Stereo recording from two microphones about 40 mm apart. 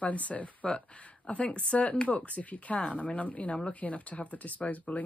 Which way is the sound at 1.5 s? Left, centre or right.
Left.